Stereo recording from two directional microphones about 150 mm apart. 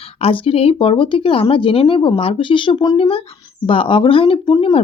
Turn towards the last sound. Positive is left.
turn(degrees=35)  # may be behind; listen again after turning